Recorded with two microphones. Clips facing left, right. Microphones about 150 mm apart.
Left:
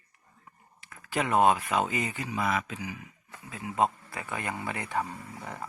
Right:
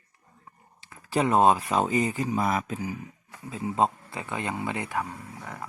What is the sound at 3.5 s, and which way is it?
Speech, 30° right (ahead or behind).